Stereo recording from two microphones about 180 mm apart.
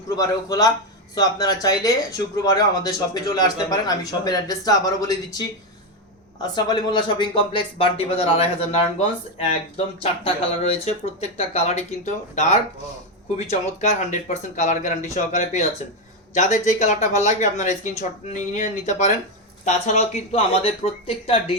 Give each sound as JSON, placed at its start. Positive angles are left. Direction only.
{"t": 0.2, "sound": "speech", "side_deg": 20}
{"t": 6.5, "sound": "speech", "side_deg": 25}